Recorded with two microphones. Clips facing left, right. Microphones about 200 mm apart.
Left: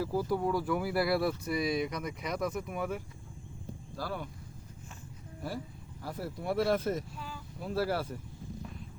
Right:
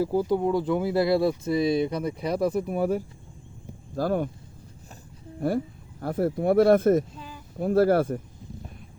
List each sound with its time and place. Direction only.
0.0 s speech: 25° right (ahead or behind)
3.9 s speech: 50° right (ahead or behind)
5.4 s speech: 55° right (ahead or behind)
7.2 s a sound: 20° right (ahead or behind)
7.6 s speech: 50° right (ahead or behind)